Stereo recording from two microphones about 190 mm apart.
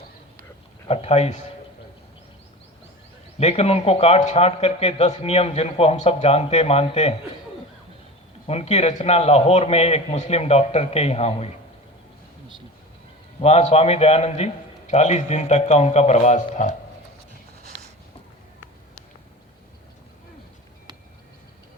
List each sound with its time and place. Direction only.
0.9 s speech: 35° left (ahead or behind)
3.3 s speech: 35° left (ahead or behind)
8.4 s speech: 35° left (ahead or behind)
13.4 s speech: 35° left (ahead or behind)